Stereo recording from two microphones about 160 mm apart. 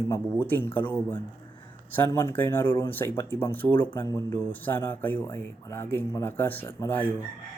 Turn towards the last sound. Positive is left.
turn(degrees=15)  # may be behind; listen again after turning